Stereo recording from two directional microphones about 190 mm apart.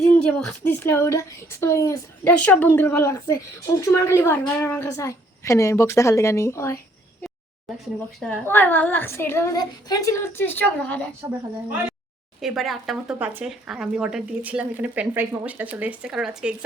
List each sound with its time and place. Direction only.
0.0 s a woman's voice: 5° left (ahead or behind)
8.2 s a woman's voice: 5° left (ahead or behind)
12.4 s speech: centre (ahead or behind)